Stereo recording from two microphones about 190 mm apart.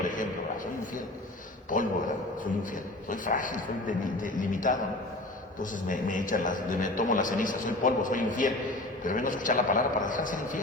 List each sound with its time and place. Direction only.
0.0 s a sound: 45° left (ahead or behind)
1.7 s a man's voice: 45° left (ahead or behind)
3.1 s a man's voice: 45° left (ahead or behind)